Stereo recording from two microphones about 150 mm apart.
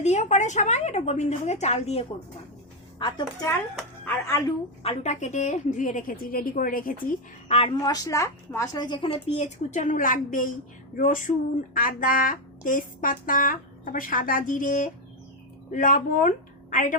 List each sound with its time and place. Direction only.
0.0 s a woman's voice: 50° left (ahead or behind)
3.0 s speech: 30° left (ahead or behind)
4.0 s speech: 20° left (ahead or behind)
4.8 s speech: 45° left (ahead or behind); by 6.9 s 70° left (ahead or behind)
7.4 s a woman's voice: 40° left (ahead or behind)
7.8 s a woman's voice: 25° left (ahead or behind); by 17.0 s 60° left (ahead or behind)